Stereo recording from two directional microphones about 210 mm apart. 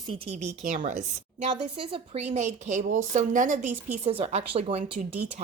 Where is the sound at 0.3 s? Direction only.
35° right (ahead or behind).